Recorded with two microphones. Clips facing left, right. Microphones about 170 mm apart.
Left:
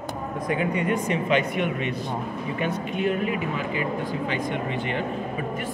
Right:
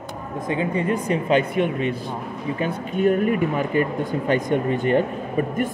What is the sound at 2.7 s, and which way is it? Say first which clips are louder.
Speech: right 8 dB; 45° right (ahead or behind).